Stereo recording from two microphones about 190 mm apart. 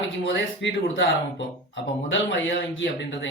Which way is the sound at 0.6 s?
70° left (ahead or behind).